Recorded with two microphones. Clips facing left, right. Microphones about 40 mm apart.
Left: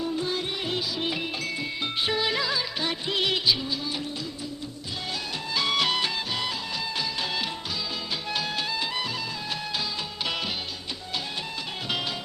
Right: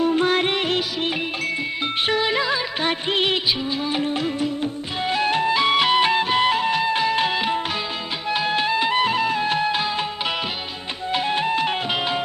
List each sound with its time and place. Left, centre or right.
0.0 s music: right
2.1 s music of bollywood: right
2.8 s music of bollywood: right
3.9 s music: right
5.5 s music: right
6.1 s music: right
11.1 s music: right